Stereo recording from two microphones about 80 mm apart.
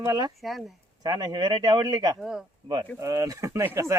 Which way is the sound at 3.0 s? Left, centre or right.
Right.